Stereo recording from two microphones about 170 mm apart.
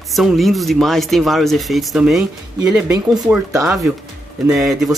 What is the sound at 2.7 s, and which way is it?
Speech, 20° right (ahead or behind).